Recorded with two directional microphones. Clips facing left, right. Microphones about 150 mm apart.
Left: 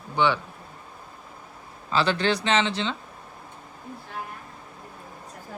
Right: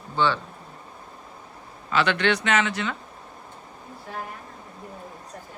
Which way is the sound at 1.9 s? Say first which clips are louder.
Right 1 dB; 35° left (ahead or behind).